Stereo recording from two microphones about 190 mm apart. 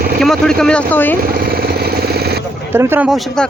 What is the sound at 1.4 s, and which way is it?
Jackhammer, 55° right (ahead or behind).